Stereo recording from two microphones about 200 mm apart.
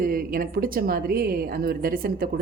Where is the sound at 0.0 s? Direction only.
45° right (ahead or behind).